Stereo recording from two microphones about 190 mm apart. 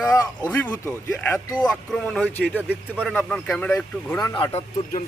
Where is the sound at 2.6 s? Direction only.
5° right (ahead or behind).